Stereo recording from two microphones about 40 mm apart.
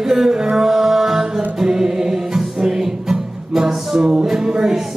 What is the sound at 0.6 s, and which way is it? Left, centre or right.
Music, centre.